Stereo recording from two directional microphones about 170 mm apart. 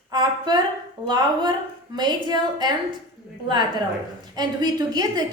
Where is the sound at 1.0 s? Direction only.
25° right (ahead or behind).